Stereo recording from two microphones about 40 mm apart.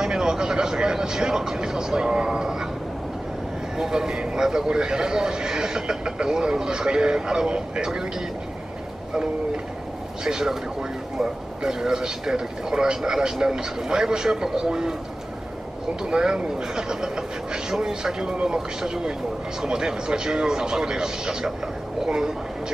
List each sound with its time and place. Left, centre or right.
0.0 s vehicle: centre
3.7 s speech: centre
10.2 s speech: centre
16.0 s speech: centre